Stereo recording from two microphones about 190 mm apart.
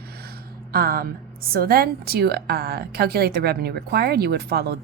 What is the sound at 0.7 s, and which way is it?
A woman's voice, 50° right (ahead or behind).